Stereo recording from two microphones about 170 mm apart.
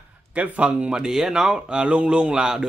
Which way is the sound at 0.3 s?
10° right (ahead or behind).